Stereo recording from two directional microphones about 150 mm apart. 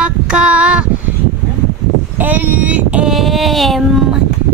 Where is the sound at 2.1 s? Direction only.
10° right (ahead or behind).